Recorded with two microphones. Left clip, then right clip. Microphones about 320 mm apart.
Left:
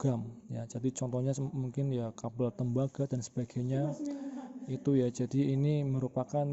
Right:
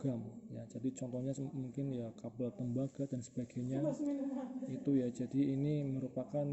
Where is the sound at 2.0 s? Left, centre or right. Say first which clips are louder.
Left 7 dB; left.